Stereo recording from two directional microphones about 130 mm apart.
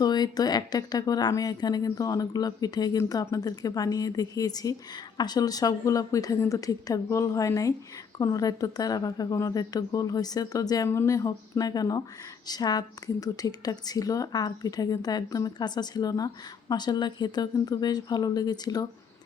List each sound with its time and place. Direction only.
0.0 s a woman's voice: 30° left (ahead or behind)